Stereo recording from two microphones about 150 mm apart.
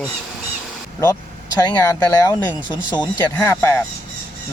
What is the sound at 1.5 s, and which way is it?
Speech, 25° left (ahead or behind).